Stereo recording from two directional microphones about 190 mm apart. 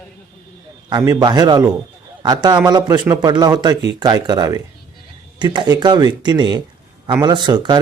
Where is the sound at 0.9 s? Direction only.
20° right (ahead or behind).